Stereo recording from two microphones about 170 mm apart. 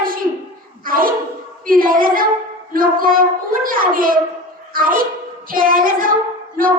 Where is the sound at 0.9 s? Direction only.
55° right (ahead or behind).